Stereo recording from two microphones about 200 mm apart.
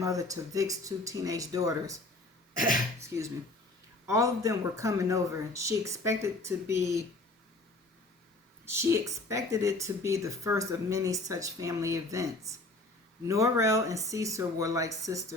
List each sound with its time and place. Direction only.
0.0 s speech: 15° right (ahead or behind)
4.1 s speech: 15° right (ahead or behind)
8.6 s speech: 10° right (ahead or behind)